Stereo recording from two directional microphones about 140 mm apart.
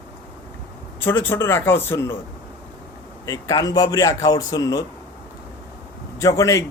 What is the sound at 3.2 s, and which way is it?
A man's voice, 25° left (ahead or behind).